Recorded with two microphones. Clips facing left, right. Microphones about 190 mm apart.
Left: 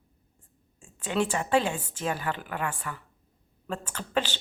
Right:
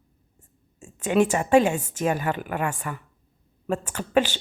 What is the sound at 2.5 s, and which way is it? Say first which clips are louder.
Speech: right 5 dB; 45° right (ahead or behind).